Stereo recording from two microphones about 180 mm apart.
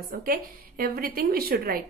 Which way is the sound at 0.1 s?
55° right (ahead or behind).